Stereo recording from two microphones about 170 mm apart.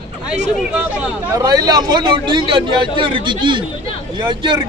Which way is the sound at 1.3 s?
25° right (ahead or behind).